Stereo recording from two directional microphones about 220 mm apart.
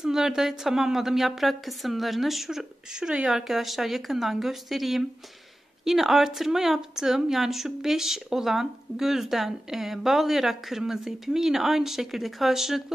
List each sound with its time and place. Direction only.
0.0 s speech: centre (ahead or behind)